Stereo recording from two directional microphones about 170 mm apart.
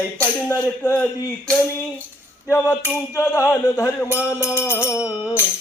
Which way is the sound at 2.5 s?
15° left (ahead or behind).